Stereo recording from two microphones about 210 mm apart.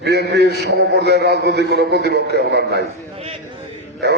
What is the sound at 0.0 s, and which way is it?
A man's voice, 50° right (ahead or behind).